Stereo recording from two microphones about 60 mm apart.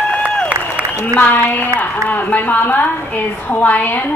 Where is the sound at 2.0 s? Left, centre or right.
Left.